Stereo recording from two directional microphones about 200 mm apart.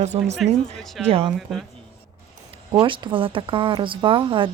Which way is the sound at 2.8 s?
25° right (ahead or behind).